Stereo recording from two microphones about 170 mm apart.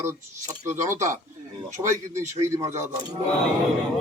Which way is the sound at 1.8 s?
15° right (ahead or behind).